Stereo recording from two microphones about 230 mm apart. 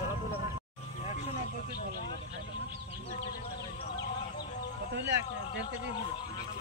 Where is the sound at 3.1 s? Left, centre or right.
Left.